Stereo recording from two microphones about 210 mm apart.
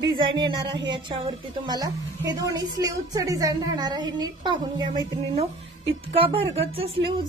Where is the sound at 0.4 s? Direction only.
20° right (ahead or behind).